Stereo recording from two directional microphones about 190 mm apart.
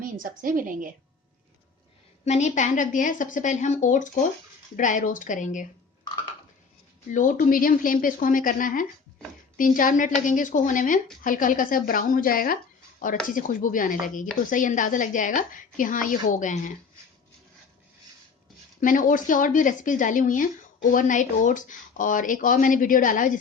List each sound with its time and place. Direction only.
0.0 s a woman's voice: 45° right (ahead or behind)
2.2 s a woman's voice: 35° left (ahead or behind)
7.1 s a woman's voice: 45° left (ahead or behind)
18.8 s a woman's voice: 45° left (ahead or behind)